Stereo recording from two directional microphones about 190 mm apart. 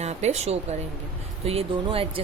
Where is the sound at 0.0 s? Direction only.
35° right (ahead or behind).